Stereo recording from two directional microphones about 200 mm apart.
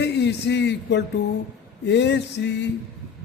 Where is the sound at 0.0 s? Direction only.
60° left (ahead or behind).